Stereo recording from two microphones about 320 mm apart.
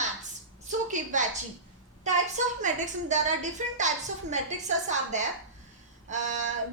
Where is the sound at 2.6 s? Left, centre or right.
Right.